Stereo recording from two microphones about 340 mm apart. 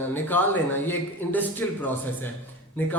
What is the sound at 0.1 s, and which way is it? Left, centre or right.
A man's voice, centre.